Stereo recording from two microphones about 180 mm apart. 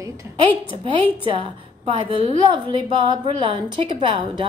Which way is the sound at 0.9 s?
30° right (ahead or behind).